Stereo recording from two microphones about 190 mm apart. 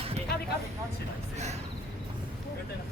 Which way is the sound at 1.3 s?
35° right (ahead or behind).